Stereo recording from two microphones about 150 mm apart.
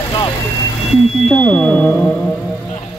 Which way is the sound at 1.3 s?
5° left (ahead or behind).